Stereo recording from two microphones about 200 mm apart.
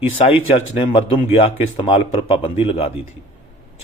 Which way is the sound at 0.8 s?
25° left (ahead or behind).